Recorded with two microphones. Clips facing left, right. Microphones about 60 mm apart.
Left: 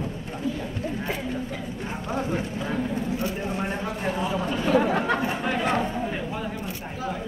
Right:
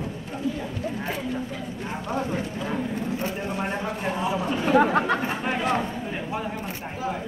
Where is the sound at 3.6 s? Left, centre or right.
Centre.